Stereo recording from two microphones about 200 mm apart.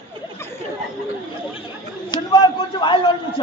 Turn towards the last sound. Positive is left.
turn(degrees=25)  # may be behind; listen again after turning